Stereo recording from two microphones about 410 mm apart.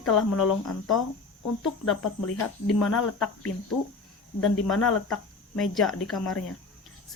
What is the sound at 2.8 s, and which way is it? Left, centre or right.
Speech, left.